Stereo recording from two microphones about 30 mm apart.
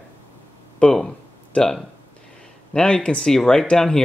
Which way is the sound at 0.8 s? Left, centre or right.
Left.